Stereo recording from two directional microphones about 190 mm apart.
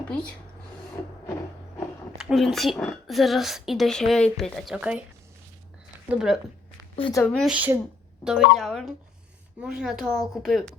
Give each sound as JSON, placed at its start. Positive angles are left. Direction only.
{"t": 2.1, "sound": "speech", "side_deg": 0}
{"t": 6.1, "sound": "speech", "side_deg": -5}
{"t": 6.9, "sound": "a woman's voice", "side_deg": 25}
{"t": 7.3, "sound": "speech", "side_deg": 0}